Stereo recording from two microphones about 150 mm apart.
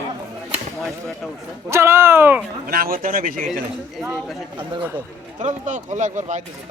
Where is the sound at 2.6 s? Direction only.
75° right (ahead or behind).